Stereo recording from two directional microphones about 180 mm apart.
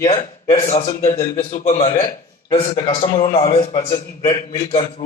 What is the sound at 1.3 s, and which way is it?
Speech, 50° left (ahead or behind).